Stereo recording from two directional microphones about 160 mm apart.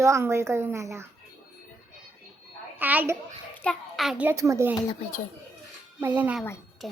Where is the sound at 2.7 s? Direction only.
10° right (ahead or behind).